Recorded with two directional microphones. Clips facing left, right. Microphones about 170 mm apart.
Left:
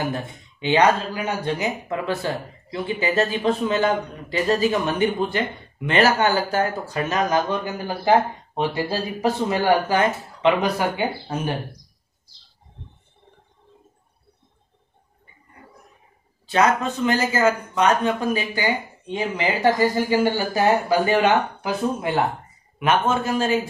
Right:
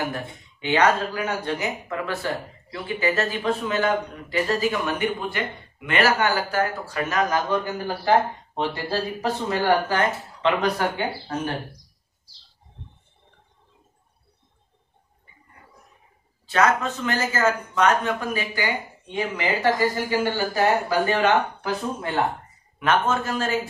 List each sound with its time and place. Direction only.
0.1 s speech: 20° left (ahead or behind)
16.8 s speech: 15° left (ahead or behind)